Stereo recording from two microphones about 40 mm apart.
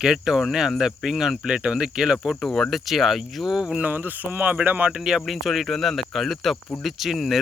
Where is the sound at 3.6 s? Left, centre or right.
Centre.